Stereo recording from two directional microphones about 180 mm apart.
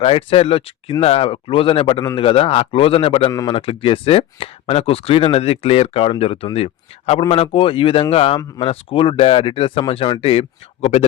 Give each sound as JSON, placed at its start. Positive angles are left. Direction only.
{"t": 0.0, "sound": "speech", "side_deg": 30}